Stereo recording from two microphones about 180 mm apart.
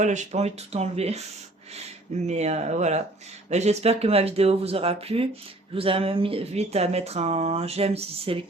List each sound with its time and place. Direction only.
0.0 s speech: 40° right (ahead or behind)